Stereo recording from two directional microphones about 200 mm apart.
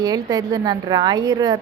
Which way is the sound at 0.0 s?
20° right (ahead or behind).